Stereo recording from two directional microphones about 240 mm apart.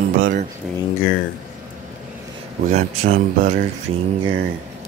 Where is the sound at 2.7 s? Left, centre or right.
Right.